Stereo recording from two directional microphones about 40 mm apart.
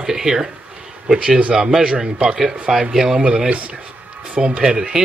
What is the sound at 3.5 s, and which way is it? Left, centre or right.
Speech, right.